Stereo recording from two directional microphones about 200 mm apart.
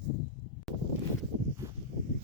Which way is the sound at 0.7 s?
Centre (ahead or behind).